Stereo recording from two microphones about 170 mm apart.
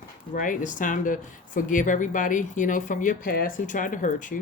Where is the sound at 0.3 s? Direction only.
50° left (ahead or behind).